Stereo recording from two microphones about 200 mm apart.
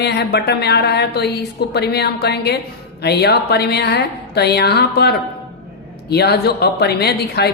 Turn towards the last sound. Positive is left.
turn(degrees=55)  # may be behind; listen again after turning